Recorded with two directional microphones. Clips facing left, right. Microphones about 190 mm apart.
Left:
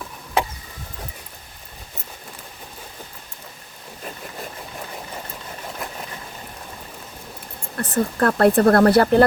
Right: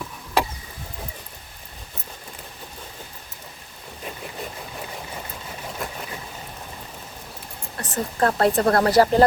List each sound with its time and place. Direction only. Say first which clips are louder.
7.8 s speech: left 3 dB; 55° left (ahead or behind)